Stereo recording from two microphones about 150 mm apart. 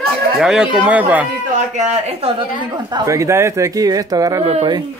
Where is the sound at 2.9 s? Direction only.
20° right (ahead or behind).